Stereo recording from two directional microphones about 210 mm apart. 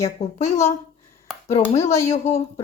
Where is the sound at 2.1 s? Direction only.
30° left (ahead or behind).